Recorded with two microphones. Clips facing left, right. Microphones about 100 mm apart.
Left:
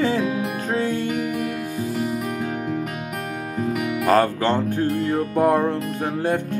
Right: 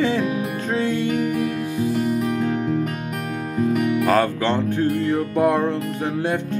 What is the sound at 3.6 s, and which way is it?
Music, 5° left (ahead or behind).